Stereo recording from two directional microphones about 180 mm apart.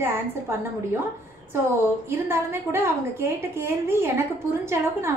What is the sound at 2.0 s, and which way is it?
A woman's voice, 15° right (ahead or behind).